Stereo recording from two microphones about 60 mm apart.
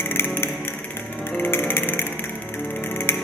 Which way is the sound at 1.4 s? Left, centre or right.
Left.